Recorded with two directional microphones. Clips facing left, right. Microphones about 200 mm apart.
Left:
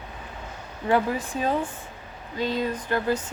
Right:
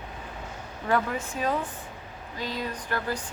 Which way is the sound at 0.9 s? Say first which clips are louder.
Left 4 dB; 30° left (ahead or behind).